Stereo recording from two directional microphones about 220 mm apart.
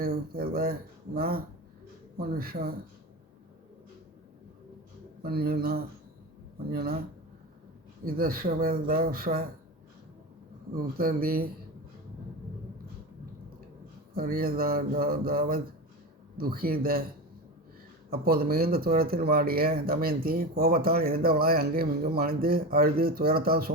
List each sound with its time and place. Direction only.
0.0 s speech: 40° right (ahead or behind)
5.2 s speech: 45° right (ahead or behind)
8.0 s speech: 40° right (ahead or behind)
10.8 s speech: 40° right (ahead or behind)
14.1 s speech: 40° right (ahead or behind)
18.1 s speech: 40° right (ahead or behind)